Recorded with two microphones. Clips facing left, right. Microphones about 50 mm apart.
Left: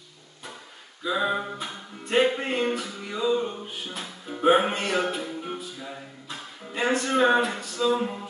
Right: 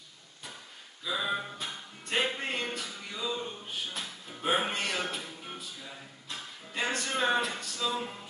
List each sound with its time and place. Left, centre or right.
1.0 s music: centre
4.0 s music: centre
6.2 s music: centre